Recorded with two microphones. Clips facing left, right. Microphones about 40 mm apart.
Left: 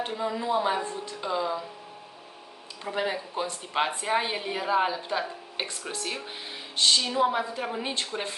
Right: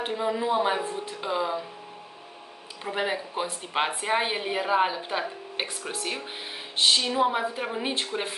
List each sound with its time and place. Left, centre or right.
0.0 s a woman's voice: centre
2.8 s a woman's voice: centre